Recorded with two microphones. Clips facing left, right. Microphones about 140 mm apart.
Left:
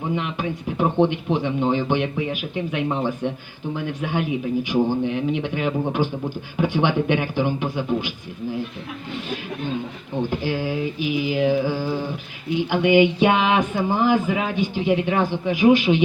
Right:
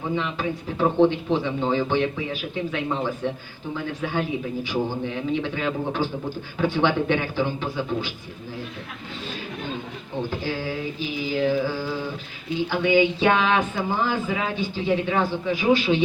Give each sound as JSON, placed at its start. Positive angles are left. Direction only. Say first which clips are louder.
{"t": 0.2, "sound": "speech", "louder": "even", "side_deg": 15}
{"t": 10.2, "sound": "speech", "louder": "left 4 dB", "side_deg": 15}